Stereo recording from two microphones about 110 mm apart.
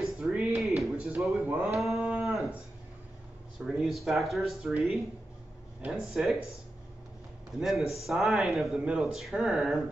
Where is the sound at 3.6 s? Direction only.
Centre (ahead or behind).